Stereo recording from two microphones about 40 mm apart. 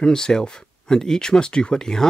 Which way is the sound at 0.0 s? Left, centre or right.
Centre.